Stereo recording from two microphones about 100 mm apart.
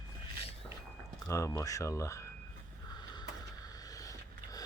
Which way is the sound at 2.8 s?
40° left (ahead or behind).